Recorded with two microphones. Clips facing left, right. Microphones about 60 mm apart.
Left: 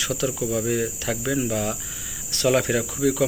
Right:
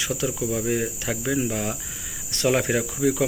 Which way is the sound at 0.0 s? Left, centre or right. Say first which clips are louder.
Left 1 dB; centre.